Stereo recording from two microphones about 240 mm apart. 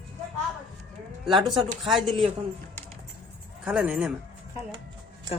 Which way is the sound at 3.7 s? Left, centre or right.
Centre.